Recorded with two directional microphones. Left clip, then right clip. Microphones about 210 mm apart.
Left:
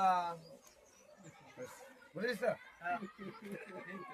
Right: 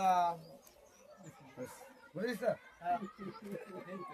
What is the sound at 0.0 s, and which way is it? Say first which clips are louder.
Bird: right 2 dB; 25° right (ahead or behind).